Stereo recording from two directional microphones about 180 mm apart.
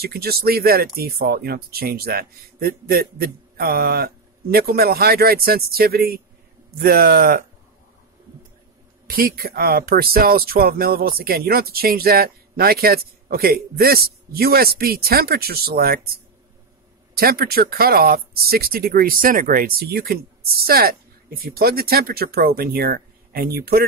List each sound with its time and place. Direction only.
0.0 s speech: 60° right (ahead or behind)
9.0 s speech: 55° right (ahead or behind)
17.1 s speech: 60° right (ahead or behind)